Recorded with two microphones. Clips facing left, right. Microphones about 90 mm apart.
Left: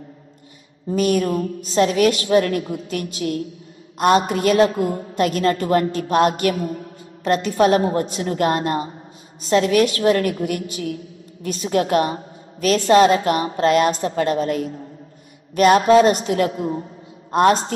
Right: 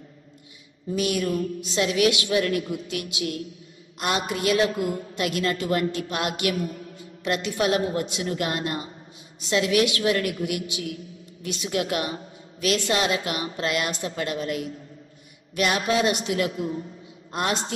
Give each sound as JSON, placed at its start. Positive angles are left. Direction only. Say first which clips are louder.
{"t": 0.8, "sound": "a woman's voice", "louder": "left 6 dB", "side_deg": 45}